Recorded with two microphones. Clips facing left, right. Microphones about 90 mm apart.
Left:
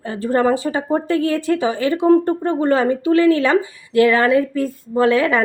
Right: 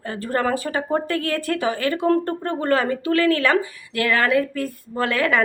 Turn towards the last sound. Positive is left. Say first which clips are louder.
# left 6 dB
turn(degrees=25)  # may be behind; listen again after turning